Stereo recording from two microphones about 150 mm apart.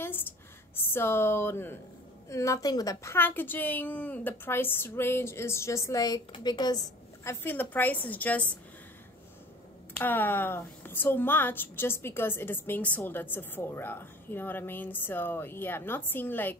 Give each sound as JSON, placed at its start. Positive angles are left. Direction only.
{"t": 0.9, "sound": "a woman's voice", "side_deg": 15}
{"t": 7.4, "sound": "a woman's voice", "side_deg": 10}
{"t": 9.9, "sound": "a woman's voice", "side_deg": 15}